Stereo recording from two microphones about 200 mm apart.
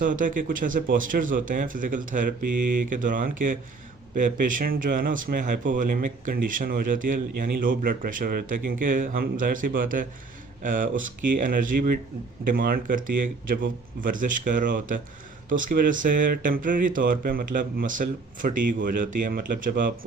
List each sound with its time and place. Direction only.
0.0 s speech: 40° right (ahead or behind)